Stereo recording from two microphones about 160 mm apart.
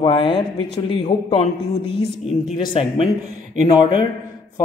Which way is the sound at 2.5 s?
35° left (ahead or behind).